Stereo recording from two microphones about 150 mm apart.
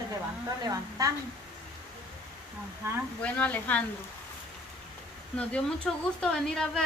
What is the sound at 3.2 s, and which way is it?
Speech, 10° left (ahead or behind).